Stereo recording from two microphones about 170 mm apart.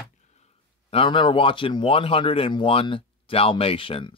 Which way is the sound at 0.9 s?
30° left (ahead or behind).